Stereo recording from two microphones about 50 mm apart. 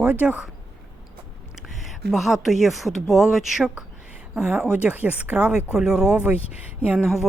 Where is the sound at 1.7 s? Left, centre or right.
Centre.